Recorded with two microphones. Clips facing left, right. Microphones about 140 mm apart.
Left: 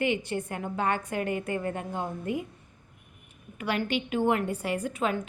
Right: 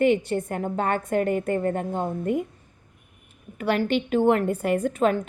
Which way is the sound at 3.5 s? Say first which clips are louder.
Right 6 dB; 45° right (ahead or behind).